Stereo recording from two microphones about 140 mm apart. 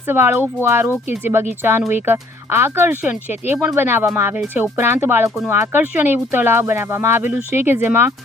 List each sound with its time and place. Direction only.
0.1 s speech: 15° right (ahead or behind)